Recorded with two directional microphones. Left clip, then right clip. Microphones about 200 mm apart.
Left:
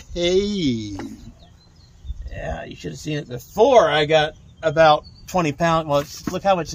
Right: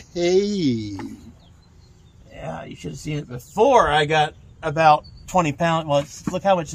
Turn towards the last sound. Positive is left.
turn(degrees=10)  # may be behind; listen again after turning